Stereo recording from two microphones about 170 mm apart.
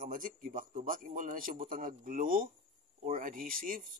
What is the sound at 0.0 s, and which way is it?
A man's voice, 55° right (ahead or behind).